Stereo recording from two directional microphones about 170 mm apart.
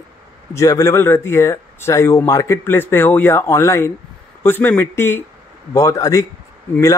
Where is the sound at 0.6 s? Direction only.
20° left (ahead or behind).